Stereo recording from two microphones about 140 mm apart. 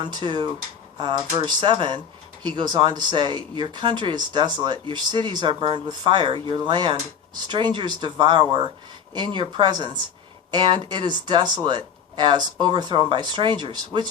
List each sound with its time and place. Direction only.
0.0 s speech: 35° right (ahead or behind)